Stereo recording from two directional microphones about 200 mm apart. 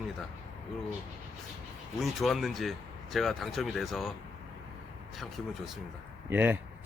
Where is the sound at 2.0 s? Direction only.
Centre (ahead or behind).